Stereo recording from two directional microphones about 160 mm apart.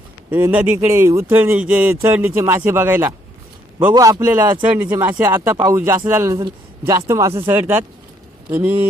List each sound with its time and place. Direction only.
0.3 s speech: 10° right (ahead or behind)
3.9 s a man's voice: 25° right (ahead or behind)
4.3 s speech: 10° right (ahead or behind)